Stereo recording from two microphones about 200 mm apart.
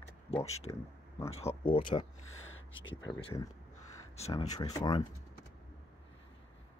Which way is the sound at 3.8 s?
30° left (ahead or behind).